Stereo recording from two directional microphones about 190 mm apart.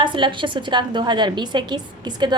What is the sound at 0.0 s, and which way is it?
A woman's voice, 25° right (ahead or behind).